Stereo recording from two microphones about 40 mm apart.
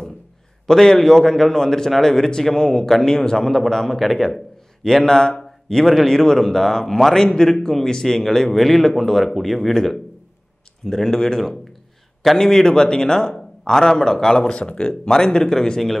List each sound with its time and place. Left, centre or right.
0.7 s speech: centre
14.5 s speech: left